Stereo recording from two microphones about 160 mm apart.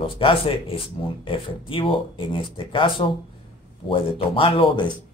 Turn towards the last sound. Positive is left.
turn(degrees=35)  # may be behind; listen again after turning